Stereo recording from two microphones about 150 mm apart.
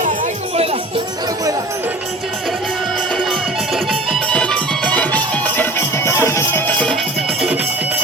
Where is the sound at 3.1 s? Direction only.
5° left (ahead or behind).